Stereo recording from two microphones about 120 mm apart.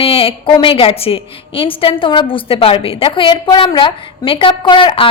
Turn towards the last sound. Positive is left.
turn(degrees=45)  # may be behind; listen again after turning